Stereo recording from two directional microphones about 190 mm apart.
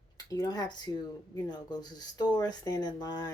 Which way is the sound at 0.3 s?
20° left (ahead or behind).